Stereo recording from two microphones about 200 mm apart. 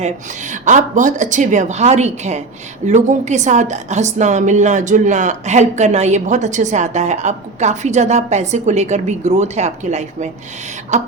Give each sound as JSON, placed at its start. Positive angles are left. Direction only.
{"t": 0.6, "sound": "a woman's voice", "side_deg": -40}